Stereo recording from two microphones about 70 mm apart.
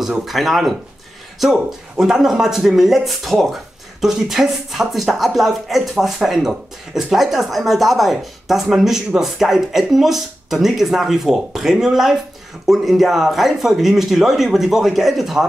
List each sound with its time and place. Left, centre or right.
0.2 s speech: centre